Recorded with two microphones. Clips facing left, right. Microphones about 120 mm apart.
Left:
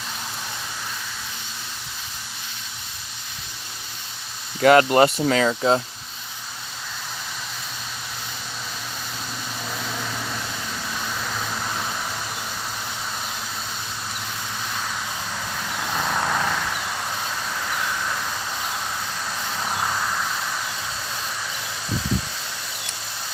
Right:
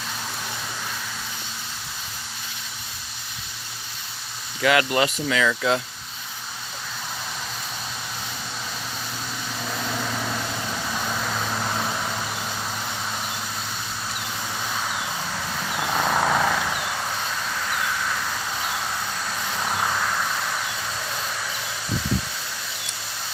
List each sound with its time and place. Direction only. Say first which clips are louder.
4.6 s speech: left 6 dB; 40° left (ahead or behind)
9.6 s vehicle: right 3 dB; 10° right (ahead or behind)
11.3 s vehicle: right 2 dB; 15° right (ahead or behind)
15.9 s vehicle: right 3 dB; 15° right (ahead or behind); by 18.2 s 5° left (ahead or behind)
19.7 s vehicle: right 1 dB; centre (ahead or behind)